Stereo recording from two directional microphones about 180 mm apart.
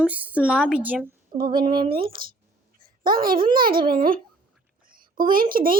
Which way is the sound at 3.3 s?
55° right (ahead or behind).